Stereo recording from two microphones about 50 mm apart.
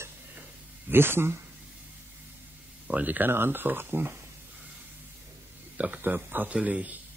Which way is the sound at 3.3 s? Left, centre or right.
Right.